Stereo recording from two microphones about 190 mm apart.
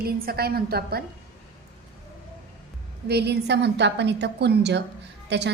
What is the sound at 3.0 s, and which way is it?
A woman's voice, 60° right (ahead or behind).